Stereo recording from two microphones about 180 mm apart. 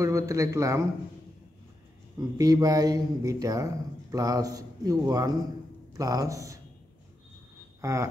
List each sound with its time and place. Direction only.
0.0 s speech: 15° right (ahead or behind)
2.1 s speech: 20° right (ahead or behind)
7.8 s speech: 15° right (ahead or behind)